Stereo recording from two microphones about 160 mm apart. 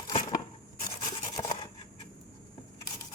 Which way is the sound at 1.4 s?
25° left (ahead or behind).